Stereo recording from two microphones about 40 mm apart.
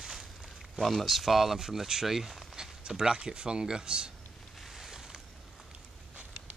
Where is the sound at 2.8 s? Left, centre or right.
Centre.